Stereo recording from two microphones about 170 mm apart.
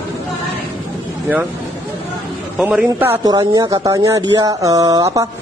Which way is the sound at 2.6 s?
5° right (ahead or behind).